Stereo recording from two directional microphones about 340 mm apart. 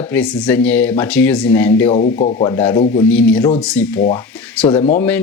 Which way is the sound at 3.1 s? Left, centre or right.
Centre.